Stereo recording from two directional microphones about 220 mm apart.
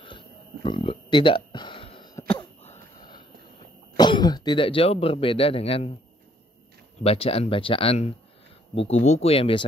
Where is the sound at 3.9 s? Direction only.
20° left (ahead or behind).